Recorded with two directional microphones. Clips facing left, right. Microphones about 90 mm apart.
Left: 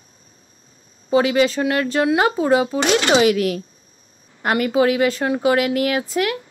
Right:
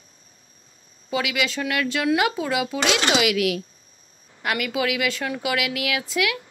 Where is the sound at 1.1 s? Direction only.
35° left (ahead or behind).